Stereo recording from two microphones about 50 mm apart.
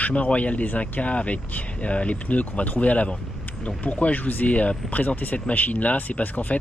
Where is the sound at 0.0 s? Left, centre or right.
Left.